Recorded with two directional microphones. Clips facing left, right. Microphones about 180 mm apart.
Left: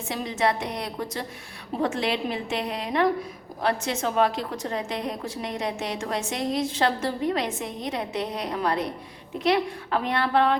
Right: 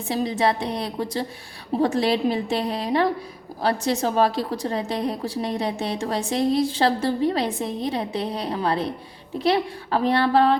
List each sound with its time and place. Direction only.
0.1 s a woman's voice: 35° right (ahead or behind)